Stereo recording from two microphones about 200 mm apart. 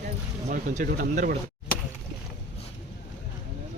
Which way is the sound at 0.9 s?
45° right (ahead or behind).